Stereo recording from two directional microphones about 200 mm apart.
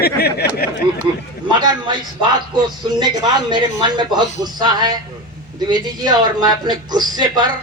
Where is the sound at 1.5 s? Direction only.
20° right (ahead or behind).